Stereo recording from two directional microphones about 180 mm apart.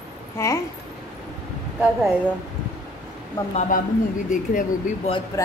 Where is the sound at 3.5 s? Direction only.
45° left (ahead or behind).